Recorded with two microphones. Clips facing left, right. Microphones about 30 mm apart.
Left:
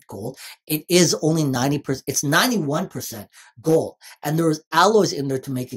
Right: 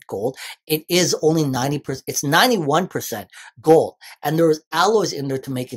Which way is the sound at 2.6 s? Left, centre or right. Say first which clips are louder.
Right 5 dB; right.